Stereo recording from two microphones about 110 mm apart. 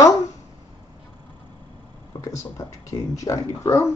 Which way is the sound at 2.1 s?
50° left (ahead or behind).